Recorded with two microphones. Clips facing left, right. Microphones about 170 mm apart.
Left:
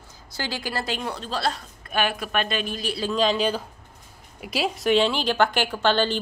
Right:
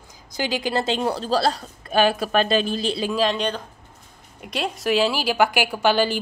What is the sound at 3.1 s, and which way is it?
A woman's voice, centre (ahead or behind).